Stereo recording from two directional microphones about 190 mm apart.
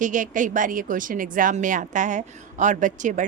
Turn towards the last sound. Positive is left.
turn(degrees=-40)  # may be behind; listen again after turning